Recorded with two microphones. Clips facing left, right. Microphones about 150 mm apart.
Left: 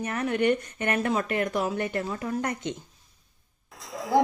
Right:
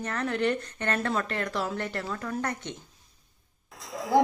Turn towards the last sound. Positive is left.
turn(degrees=0)  # may be behind; listen again after turning